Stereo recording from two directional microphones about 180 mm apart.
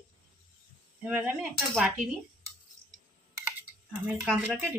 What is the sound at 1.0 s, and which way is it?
Speech, 5° right (ahead or behind).